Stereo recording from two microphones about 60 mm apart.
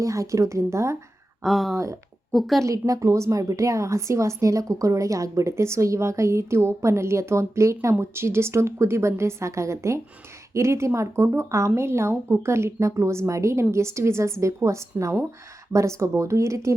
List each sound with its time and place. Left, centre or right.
0.0 s a woman's voice: right
1.4 s speech: centre
1.7 s a woman's voice: right
2.3 s a woman's voice: centre
2.6 s a woman's voice: right
7.9 s a woman's voice: right
11.7 s a woman's voice: right